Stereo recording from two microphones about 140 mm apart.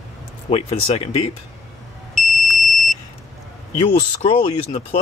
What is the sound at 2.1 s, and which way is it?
Smoke detector, centre (ahead or behind).